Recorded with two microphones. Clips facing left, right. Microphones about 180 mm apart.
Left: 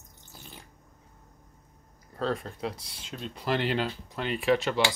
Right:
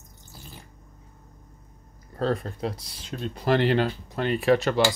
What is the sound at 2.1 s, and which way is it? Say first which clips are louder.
Speech: right 4 dB; 40° right (ahead or behind).